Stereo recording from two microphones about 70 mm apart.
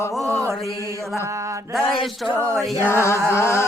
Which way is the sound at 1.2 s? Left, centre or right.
Right.